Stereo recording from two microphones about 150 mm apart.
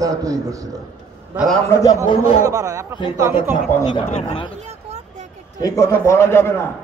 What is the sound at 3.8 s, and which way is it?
Speech, 35° left (ahead or behind).